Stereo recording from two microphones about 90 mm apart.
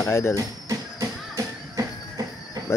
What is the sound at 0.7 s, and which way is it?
Music, 40° right (ahead or behind).